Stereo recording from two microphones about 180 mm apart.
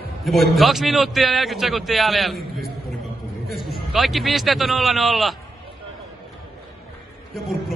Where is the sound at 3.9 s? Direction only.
Centre (ahead or behind).